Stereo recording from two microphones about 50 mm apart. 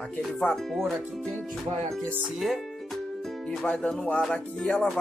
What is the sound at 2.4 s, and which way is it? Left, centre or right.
Music, centre.